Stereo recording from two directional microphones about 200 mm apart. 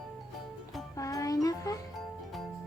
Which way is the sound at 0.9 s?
15° left (ahead or behind).